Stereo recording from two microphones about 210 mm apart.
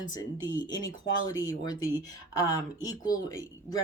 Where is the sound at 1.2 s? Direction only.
15° left (ahead or behind).